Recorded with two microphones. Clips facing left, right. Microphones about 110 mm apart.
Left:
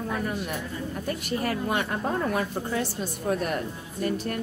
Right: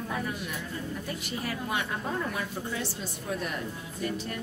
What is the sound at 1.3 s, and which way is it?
A woman's voice, 50° left (ahead or behind).